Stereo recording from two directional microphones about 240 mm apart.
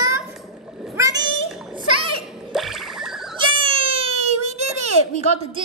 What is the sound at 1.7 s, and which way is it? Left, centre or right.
Children playing, right.